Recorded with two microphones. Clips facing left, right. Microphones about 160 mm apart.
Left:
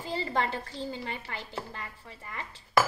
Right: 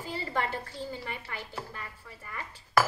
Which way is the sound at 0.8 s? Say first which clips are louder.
Left 2 dB; 25° left (ahead or behind).